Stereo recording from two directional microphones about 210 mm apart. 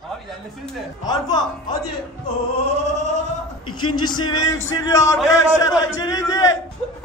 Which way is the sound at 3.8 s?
20° left (ahead or behind).